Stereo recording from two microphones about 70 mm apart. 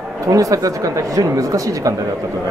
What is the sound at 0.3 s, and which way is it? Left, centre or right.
Speech, right.